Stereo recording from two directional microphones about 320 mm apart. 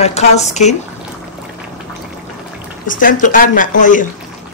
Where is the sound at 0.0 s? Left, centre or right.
Centre.